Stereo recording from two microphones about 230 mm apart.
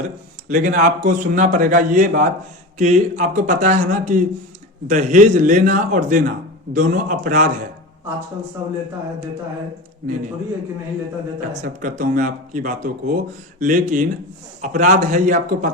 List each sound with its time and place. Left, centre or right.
0.4 s a man's voice: right
11.6 s a man's voice: right